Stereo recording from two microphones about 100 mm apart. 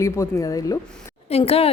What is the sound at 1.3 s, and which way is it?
Speech, 90° left.